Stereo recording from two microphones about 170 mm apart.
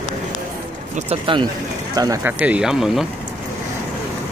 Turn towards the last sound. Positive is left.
turn(degrees=-5)  # may be behind; listen again after turning